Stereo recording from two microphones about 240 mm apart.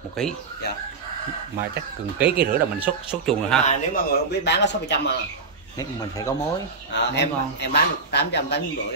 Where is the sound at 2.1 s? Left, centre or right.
Centre.